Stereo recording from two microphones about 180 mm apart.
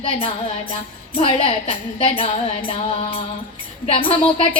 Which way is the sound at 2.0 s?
30° left (ahead or behind).